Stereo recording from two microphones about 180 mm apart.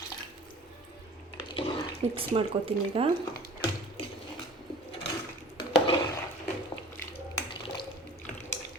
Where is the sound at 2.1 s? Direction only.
30° right (ahead or behind).